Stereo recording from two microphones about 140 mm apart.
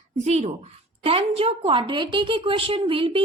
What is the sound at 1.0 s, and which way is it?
A woman's voice, 45° right (ahead or behind).